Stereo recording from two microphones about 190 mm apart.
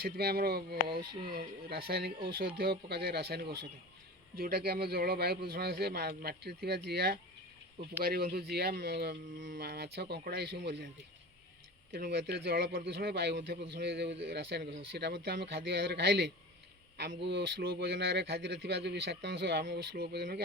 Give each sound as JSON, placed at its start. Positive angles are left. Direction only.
{"t": 0.0, "sound": "a man's voice", "side_deg": -55}
{"t": 11.9, "sound": "a man's voice", "side_deg": -55}